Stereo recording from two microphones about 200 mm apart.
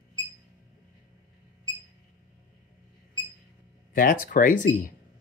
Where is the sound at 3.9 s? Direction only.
45° left (ahead or behind).